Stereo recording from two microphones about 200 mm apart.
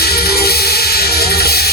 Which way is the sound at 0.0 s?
50° left (ahead or behind).